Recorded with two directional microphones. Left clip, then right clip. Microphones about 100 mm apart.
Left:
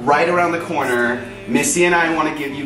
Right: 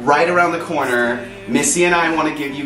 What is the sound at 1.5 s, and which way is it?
Speech, 15° right (ahead or behind).